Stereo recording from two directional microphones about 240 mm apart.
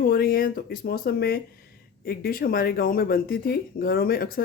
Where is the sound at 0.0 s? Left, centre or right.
Left.